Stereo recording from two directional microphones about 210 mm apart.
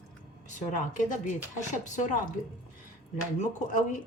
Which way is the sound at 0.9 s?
40° left (ahead or behind).